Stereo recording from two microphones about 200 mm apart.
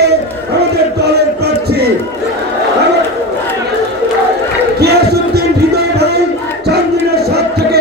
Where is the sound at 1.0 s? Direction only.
55° right (ahead or behind).